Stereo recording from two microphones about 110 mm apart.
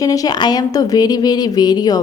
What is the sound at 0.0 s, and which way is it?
A woman's voice, 35° left (ahead or behind).